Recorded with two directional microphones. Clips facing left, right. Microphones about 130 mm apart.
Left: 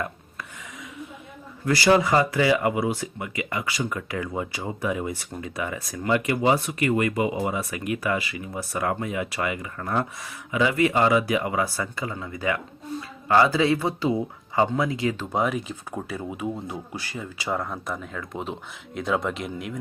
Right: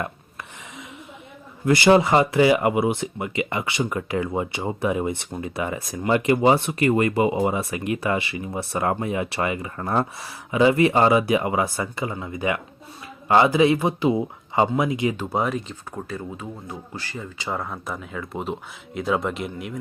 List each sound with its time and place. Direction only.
1.6 s speech: 20° right (ahead or behind)
15.2 s speech: 5° right (ahead or behind)